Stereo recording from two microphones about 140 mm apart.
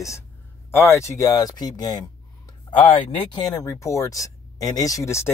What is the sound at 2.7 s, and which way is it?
Speech, 40° left (ahead or behind).